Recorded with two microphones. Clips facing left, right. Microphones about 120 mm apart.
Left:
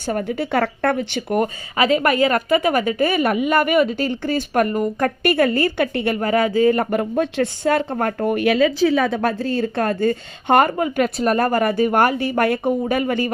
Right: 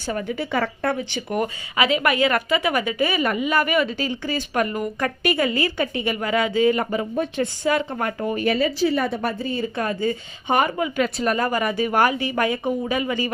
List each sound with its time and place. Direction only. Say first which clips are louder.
0.0 s speech: left 4 dB; 50° left (ahead or behind)
6.1 s speech: left 3 dB; 45° left (ahead or behind)
6.9 s speech: left 4 dB; 70° left (ahead or behind)
7.9 s speech: left 4 dB; 40° left (ahead or behind)
8.3 s speech: left 5 dB; 80° left; by 13.3 s 50° left (ahead or behind)